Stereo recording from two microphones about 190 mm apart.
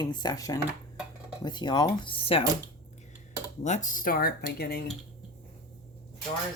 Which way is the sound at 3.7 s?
40° left (ahead or behind).